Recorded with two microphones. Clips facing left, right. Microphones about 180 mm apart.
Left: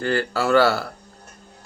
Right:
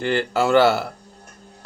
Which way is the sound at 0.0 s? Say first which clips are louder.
Right 2 dB; 20° right (ahead or behind).